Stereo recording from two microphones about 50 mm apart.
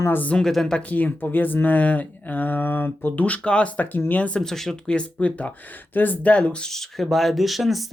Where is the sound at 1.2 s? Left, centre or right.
Left.